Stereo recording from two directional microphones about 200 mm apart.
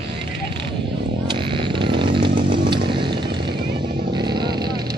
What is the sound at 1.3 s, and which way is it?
Chainsaw, 25° right (ahead or behind).